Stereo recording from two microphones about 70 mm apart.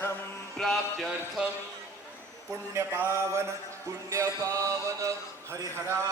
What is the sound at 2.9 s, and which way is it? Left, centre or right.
Male singing, right.